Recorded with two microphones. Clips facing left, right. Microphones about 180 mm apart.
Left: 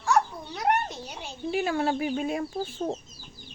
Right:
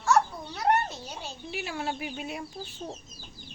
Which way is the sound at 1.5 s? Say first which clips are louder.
Left 8 dB; 50° left (ahead or behind).